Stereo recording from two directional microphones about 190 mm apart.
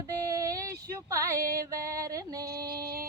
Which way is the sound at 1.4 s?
50° right (ahead or behind).